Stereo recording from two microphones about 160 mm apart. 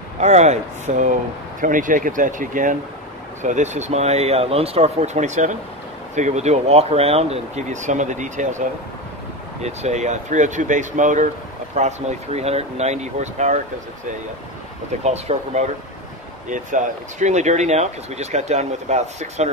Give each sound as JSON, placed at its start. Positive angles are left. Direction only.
{"t": 0.2, "sound": "speech", "side_deg": -45}
{"t": 15.0, "sound": "speech", "side_deg": -45}